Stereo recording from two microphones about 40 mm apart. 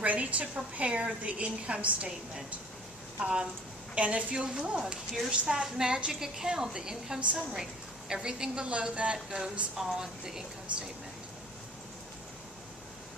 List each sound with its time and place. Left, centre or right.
0.0 s a woman's voice: right
3.9 s a woman's voice: right
4.8 s a woman's voice: centre